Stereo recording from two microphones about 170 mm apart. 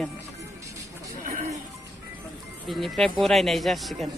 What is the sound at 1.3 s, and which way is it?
Music, 50° right (ahead or behind).